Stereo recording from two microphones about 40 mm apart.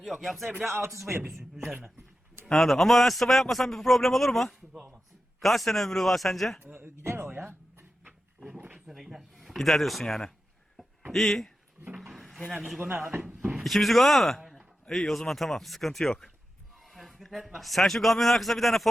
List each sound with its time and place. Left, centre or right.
0.0 s a man's voice: centre
2.5 s a man's voice: centre
6.7 s a sound: right
8.4 s a sound: right
8.9 s a sound: centre
9.6 s a man's voice: centre
10.0 s speech: centre
11.9 s drawer open or close: centre
12.9 s speech: right
13.2 s a sound: right
13.7 s a man's voice: centre
16.7 s a man's voice: centre